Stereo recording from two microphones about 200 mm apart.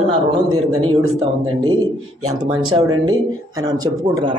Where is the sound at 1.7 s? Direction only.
85° right.